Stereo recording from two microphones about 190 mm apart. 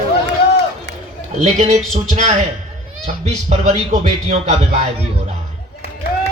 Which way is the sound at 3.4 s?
35° right (ahead or behind).